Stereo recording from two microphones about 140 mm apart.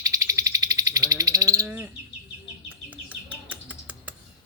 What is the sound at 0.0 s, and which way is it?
Bird, 25° right (ahead or behind).